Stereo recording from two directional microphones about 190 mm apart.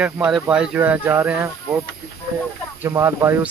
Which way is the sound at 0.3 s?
5° right (ahead or behind).